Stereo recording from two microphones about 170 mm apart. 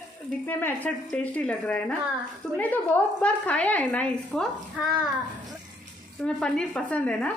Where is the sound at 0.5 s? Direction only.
10° left (ahead or behind).